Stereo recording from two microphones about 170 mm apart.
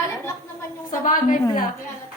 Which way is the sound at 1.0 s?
50° left (ahead or behind).